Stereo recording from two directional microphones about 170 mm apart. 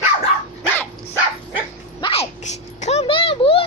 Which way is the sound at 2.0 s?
35° left (ahead or behind).